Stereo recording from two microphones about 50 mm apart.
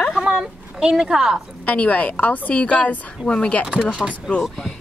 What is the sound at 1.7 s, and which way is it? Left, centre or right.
A woman's voice, left.